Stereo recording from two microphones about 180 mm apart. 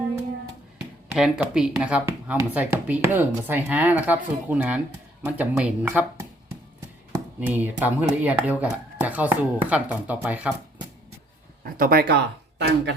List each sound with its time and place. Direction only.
1.1 s speech: 5° right (ahead or behind)
7.3 s speech: 10° right (ahead or behind)
11.6 s speech: 55° right (ahead or behind); by 12.9 s 75° right (ahead or behind)